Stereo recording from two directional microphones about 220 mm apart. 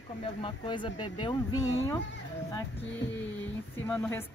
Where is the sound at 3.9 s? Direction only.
10° left (ahead or behind).